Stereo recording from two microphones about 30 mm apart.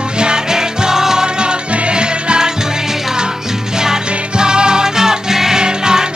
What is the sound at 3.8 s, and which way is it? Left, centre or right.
Music, right.